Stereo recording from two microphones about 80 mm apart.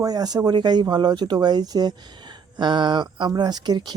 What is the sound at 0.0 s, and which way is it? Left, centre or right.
Speech, right.